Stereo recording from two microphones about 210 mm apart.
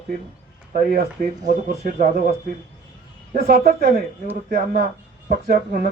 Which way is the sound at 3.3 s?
45° right (ahead or behind).